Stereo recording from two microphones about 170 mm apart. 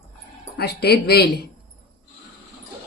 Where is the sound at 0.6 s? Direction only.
70° left (ahead or behind).